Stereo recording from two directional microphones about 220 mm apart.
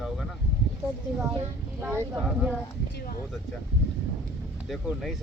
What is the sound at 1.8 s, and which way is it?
Speech, 10° right (ahead or behind).